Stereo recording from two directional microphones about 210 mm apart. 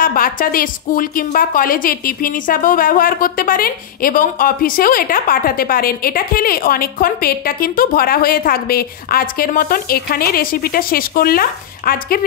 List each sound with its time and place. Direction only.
0.0 s a woman's voice: 40° left (ahead or behind)